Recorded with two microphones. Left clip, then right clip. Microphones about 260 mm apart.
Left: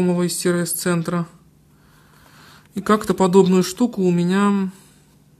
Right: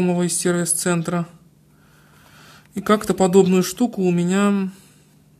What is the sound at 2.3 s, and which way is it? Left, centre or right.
Speech, centre.